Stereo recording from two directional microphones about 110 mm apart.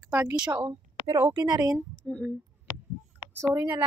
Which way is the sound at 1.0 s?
25° right (ahead or behind).